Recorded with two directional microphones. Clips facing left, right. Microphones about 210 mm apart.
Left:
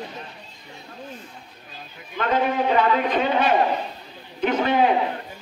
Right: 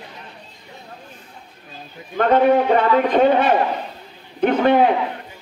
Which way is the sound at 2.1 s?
55° right (ahead or behind).